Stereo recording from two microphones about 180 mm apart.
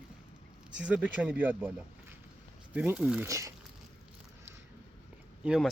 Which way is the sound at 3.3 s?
15° right (ahead or behind).